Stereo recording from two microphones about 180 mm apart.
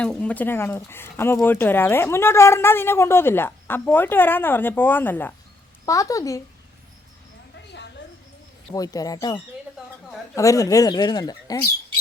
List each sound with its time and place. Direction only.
0.0 s speech: 5° left (ahead or behind)
8.7 s speech: 20° left (ahead or behind)